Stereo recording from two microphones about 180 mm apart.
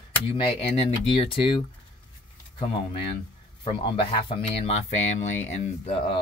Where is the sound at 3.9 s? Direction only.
30° left (ahead or behind).